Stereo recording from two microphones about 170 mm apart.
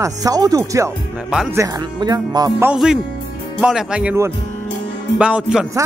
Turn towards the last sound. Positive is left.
turn(degrees=-5)  # may be behind; listen again after turning